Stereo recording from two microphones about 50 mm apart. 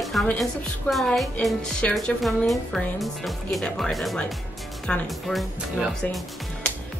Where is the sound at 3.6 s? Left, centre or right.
Centre.